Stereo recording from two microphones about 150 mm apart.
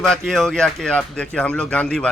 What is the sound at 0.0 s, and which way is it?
A man's voice, 5° left (ahead or behind).